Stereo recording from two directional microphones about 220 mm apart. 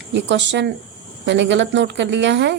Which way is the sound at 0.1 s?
55° right (ahead or behind).